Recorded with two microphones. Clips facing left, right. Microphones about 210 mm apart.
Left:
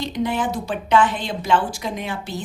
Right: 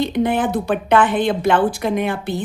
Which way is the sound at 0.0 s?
55° right (ahead or behind).